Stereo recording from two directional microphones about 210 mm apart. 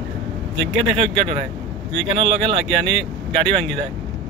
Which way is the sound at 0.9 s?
30° right (ahead or behind).